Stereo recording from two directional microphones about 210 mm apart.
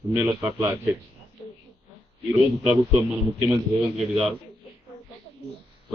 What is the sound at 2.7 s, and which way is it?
A man's voice, 5° right (ahead or behind).